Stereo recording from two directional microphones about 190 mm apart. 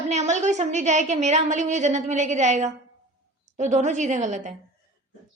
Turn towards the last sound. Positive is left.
turn(degrees=-40)  # may be behind; listen again after turning